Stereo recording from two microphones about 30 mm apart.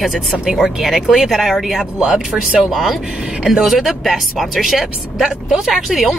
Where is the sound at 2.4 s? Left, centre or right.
Right.